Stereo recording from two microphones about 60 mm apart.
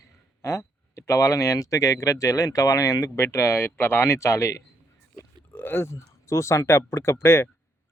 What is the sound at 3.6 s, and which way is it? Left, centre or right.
Speech, left.